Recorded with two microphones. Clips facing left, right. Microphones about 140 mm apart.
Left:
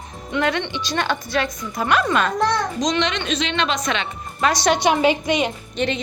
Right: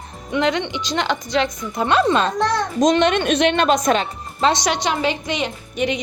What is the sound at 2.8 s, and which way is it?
A woman's voice, 50° right (ahead or behind).